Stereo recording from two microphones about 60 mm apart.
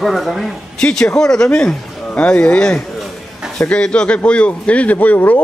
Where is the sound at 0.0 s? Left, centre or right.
Centre.